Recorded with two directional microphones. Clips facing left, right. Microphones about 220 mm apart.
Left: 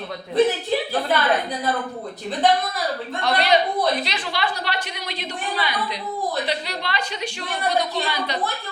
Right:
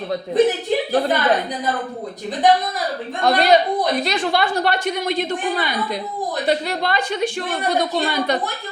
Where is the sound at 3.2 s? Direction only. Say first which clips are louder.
Right 5 dB; 45° right (ahead or behind).